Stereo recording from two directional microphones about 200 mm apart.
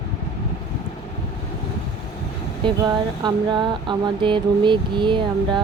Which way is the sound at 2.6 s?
20° right (ahead or behind).